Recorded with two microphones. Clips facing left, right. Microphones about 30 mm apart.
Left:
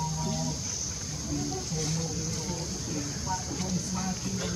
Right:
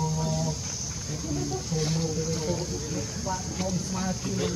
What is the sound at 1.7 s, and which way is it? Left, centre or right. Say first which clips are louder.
Speech: right 8 dB; centre.